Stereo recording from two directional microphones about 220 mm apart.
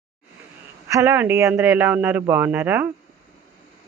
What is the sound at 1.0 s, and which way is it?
Speech, 10° right (ahead or behind).